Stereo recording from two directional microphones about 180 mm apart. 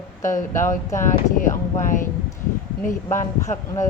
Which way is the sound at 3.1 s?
15° left (ahead or behind).